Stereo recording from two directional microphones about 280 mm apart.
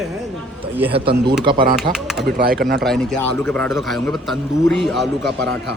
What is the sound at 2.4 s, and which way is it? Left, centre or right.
Speech, right.